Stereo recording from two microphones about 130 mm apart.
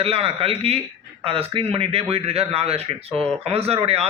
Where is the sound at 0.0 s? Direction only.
50° right (ahead or behind).